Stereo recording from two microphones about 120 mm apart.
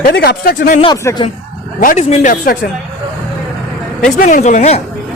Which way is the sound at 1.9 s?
80° left.